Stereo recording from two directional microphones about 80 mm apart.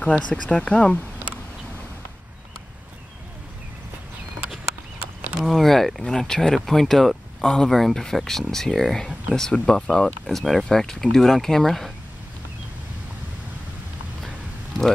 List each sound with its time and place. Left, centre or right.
0.3 s speech: centre
5.4 s speech: centre